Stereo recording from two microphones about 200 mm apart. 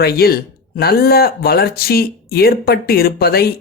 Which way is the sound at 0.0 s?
50° left (ahead or behind).